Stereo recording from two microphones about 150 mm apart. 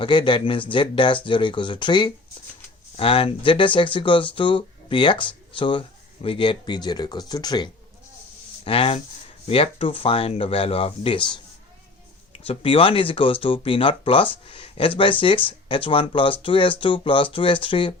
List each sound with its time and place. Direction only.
0.0 s speech: 35° left (ahead or behind)
8.6 s speech: 40° left (ahead or behind)
12.5 s speech: 40° left (ahead or behind)